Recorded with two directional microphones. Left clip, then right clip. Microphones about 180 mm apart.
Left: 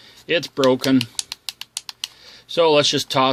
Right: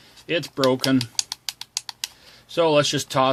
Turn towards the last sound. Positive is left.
turn(degrees=35)  # may be behind; listen again after turning